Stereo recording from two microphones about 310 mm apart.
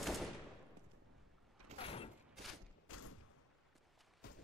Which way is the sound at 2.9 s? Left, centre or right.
Left.